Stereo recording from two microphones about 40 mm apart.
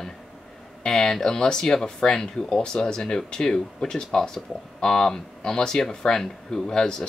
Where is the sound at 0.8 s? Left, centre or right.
Centre.